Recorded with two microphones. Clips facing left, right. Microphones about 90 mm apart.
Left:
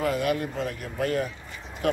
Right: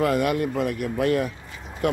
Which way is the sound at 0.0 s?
65° right (ahead or behind).